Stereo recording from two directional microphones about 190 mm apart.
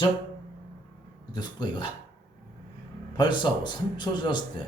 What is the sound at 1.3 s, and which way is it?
Speech, 20° left (ahead or behind).